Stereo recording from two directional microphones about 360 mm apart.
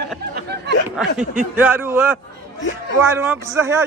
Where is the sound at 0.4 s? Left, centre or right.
Right.